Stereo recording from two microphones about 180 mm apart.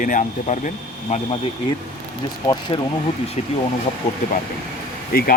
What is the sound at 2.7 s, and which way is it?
Speech, 30° left (ahead or behind).